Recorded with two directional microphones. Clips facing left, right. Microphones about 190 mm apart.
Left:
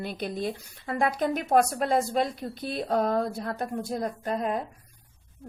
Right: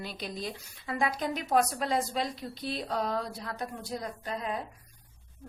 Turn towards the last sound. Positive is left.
turn(degrees=50)  # may be behind; listen again after turning